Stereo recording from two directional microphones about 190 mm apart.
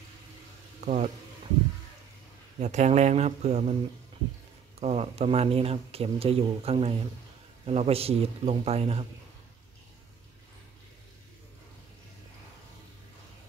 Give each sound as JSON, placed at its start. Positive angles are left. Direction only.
{"t": 0.8, "sound": "speech", "side_deg": -40}
{"t": 2.6, "sound": "speech", "side_deg": -35}
{"t": 4.7, "sound": "speech", "side_deg": -30}